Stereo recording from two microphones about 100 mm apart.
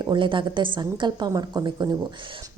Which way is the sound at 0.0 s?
50° right (ahead or behind).